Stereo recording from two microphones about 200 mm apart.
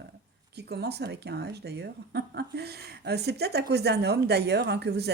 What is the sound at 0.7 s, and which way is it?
Speech, 55° right (ahead or behind).